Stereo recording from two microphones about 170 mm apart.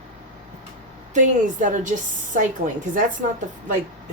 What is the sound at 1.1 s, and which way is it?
A woman's voice, 45° right (ahead or behind).